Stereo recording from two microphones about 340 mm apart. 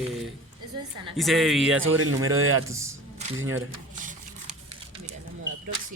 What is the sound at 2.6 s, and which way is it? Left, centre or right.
Speech, centre.